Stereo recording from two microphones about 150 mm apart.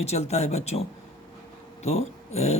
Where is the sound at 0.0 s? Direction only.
45° left (ahead or behind).